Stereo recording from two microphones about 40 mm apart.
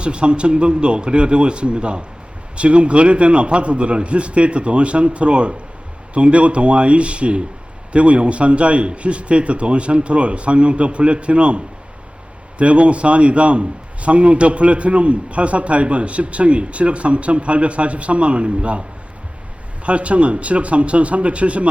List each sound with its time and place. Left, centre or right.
0.0 s a man's voice: right